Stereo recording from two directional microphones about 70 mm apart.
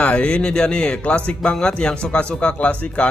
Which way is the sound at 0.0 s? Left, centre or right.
Centre.